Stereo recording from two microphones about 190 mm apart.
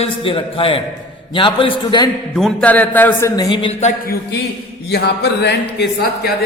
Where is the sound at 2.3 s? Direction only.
5° left (ahead or behind); by 3.7 s 25° left (ahead or behind).